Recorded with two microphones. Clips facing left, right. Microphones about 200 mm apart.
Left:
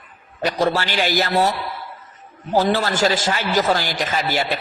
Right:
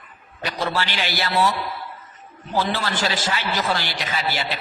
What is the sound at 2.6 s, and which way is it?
A man's voice, 45° left (ahead or behind).